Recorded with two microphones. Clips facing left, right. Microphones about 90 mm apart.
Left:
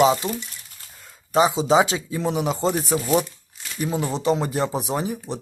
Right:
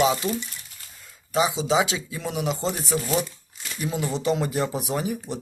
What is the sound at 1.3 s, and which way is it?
Speech, 40° left (ahead or behind).